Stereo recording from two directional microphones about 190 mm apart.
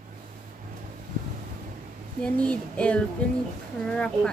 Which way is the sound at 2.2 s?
5° left (ahead or behind).